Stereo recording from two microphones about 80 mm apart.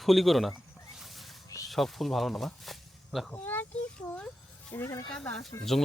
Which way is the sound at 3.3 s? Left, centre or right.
Left.